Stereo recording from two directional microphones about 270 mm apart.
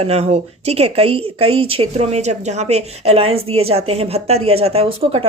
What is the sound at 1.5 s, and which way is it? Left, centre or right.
Speech, right.